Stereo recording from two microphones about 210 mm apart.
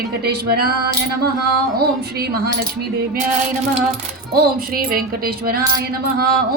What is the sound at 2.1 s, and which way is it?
Speech, 50° right (ahead or behind).